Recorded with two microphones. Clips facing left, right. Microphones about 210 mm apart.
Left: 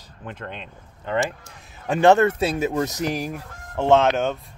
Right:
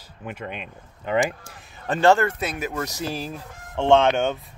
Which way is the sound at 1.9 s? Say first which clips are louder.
Left 3 dB; 20° left (ahead or behind).